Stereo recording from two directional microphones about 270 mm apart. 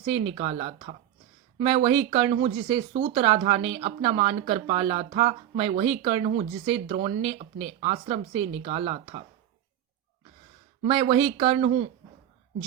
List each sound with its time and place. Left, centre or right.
0.0 s speech: right
10.8 s speech: right